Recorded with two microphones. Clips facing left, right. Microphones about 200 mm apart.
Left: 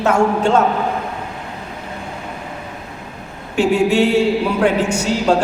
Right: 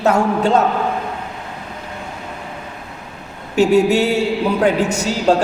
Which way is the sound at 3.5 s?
40° right (ahead or behind).